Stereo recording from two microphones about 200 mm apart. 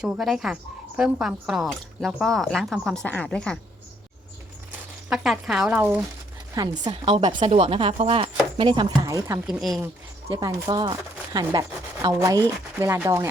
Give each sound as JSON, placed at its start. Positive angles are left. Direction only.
{"t": 0.0, "sound": "speech", "side_deg": -5}
{"t": 5.0, "sound": "speech", "side_deg": 0}
{"t": 6.6, "sound": "chopping", "side_deg": -20}
{"t": 9.5, "sound": "speech", "side_deg": 0}
{"t": 10.2, "sound": "chopping", "side_deg": -15}
{"t": 12.0, "sound": "speech", "side_deg": -15}